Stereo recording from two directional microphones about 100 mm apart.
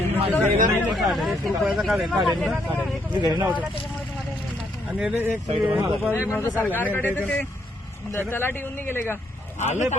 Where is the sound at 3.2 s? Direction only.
45° right (ahead or behind).